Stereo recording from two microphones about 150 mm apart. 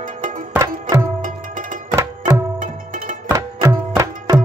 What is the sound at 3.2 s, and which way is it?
Tabla, 20° right (ahead or behind).